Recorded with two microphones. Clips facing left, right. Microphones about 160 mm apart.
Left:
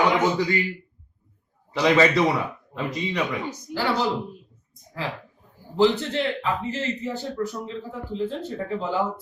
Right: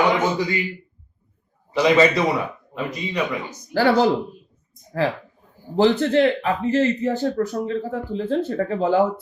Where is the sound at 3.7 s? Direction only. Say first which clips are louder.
Right 8 dB; 60° right (ahead or behind).